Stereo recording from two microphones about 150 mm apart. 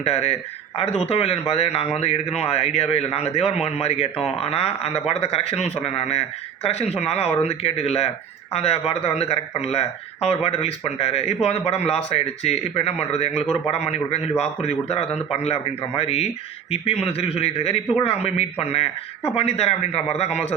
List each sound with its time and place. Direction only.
0.0 s a man's voice: 45° left (ahead or behind)